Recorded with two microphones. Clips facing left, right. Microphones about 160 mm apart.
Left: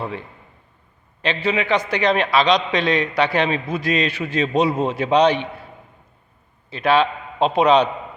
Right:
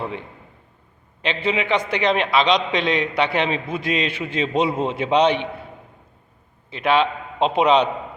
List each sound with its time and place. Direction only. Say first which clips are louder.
0.0 s a man's voice: even; 20° right (ahead or behind)
6.7 s a man's voice: left 1 dB; 20° right (ahead or behind)